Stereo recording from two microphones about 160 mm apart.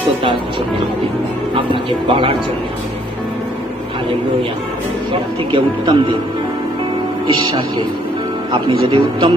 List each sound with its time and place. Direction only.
1.5 s speech: 35° right (ahead or behind)
5.5 s speech: 30° right (ahead or behind)
8.5 s speech: 30° right (ahead or behind)